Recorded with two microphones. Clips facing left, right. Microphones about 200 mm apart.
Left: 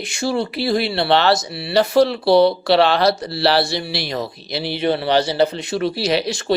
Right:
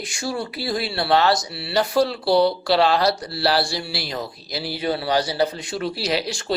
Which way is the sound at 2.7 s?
70° left (ahead or behind).